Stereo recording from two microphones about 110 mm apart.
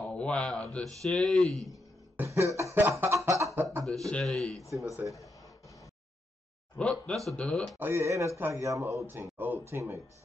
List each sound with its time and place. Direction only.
0.0 s speech: 10° left (ahead or behind)
2.1 s cough: 25° right (ahead or behind)
3.8 s speech: centre (ahead or behind)
5.0 s speech: 30° left (ahead or behind)
6.8 s speech: 5° left (ahead or behind)
7.8 s speech: 25° right (ahead or behind)